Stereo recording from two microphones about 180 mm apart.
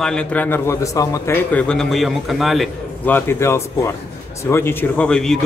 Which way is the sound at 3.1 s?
10° left (ahead or behind).